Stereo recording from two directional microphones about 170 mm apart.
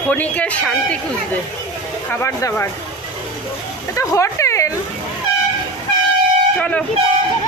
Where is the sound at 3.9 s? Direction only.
20° left (ahead or behind).